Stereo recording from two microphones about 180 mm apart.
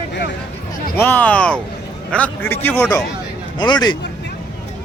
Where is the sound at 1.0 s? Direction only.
10° left (ahead or behind).